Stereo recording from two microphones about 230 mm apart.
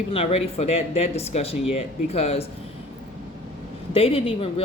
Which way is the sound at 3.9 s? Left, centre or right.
Left.